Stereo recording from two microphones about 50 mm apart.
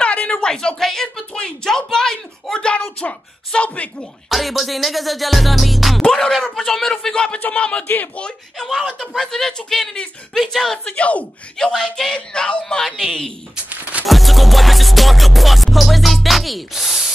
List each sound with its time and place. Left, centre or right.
0.0 s a sound: left
0.3 s speech: centre
4.3 s music: centre
6.0 s a man's voice: centre
7.3 s speech: left
8.5 s a man's voice: centre
11.0 s speech: left
11.5 s a man's voice: centre
14.0 s music: centre